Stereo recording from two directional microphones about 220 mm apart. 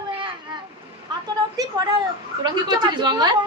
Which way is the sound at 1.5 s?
15° right (ahead or behind).